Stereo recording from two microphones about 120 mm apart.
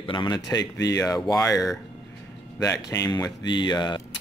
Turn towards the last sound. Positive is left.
turn(degrees=35)  # may be behind; listen again after turning